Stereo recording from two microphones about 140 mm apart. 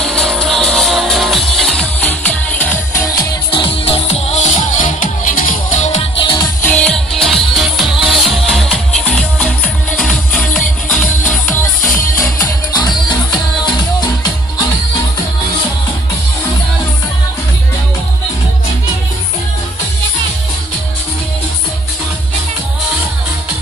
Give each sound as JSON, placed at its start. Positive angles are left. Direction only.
{"t": 0.0, "sound": "music", "side_deg": 5}
{"t": 3.1, "sound": "music", "side_deg": 25}
{"t": 3.6, "sound": "music", "side_deg": 40}
{"t": 6.1, "sound": "music", "side_deg": 35}
{"t": 6.6, "sound": "music", "side_deg": 10}
{"t": 12.7, "sound": "music", "side_deg": 30}